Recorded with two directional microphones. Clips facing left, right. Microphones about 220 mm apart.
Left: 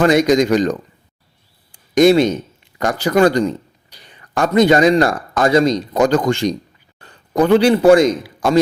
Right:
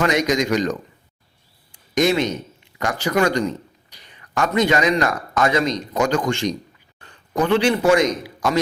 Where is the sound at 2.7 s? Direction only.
35° left (ahead or behind).